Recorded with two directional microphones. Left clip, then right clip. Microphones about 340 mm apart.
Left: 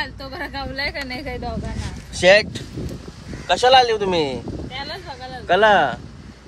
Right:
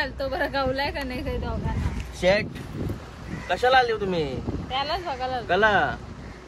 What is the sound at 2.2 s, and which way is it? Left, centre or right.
Speech, left.